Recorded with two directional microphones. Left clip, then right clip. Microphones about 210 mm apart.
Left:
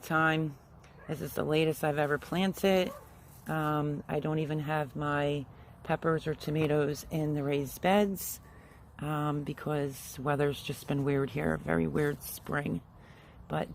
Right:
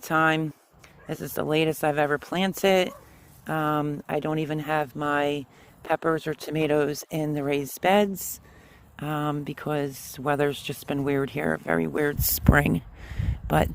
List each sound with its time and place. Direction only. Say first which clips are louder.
0.0 s speech: right 6 dB; 45° right (ahead or behind)